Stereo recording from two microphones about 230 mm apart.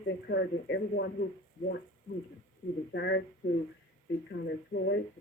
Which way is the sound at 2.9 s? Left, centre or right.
Left.